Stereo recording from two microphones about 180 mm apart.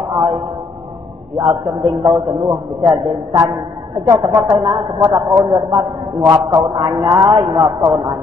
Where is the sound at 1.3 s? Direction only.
20° right (ahead or behind).